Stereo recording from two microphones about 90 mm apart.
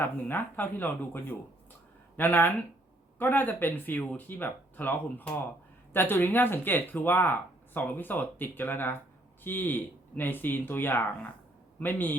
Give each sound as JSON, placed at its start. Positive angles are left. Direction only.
{"t": 0.0, "sound": "speech", "side_deg": 20}